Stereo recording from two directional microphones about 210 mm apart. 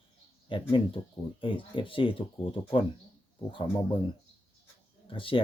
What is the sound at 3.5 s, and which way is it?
Speech, 25° left (ahead or behind).